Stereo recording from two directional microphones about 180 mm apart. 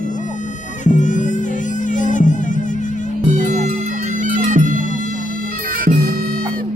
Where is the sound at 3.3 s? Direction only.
40° right (ahead or behind).